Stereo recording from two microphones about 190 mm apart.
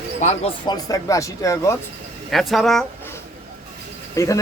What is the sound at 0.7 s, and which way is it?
Speech, 20° left (ahead or behind).